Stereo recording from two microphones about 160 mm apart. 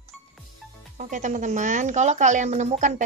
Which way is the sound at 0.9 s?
50° right (ahead or behind).